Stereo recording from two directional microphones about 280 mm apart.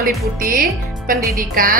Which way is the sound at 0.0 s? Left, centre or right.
Right.